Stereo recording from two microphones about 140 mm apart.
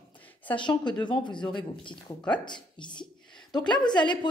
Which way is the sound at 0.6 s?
30° left (ahead or behind).